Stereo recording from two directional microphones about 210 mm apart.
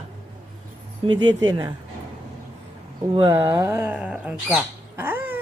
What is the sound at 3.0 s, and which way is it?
Speech, 15° right (ahead or behind).